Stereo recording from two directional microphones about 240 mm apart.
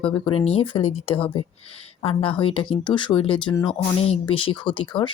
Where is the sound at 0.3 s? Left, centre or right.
Left.